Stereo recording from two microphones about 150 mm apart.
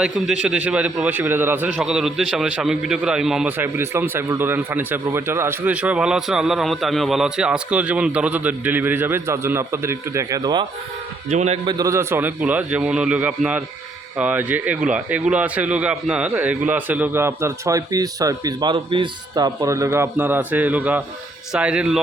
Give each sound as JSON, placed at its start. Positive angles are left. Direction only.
{"t": 0.0, "sound": "a man's voice", "side_deg": -5}
{"t": 11.3, "sound": "a man's voice", "side_deg": -50}
{"t": 11.6, "sound": "a man's voice", "side_deg": -25}
{"t": 19.6, "sound": "a man's voice", "side_deg": -20}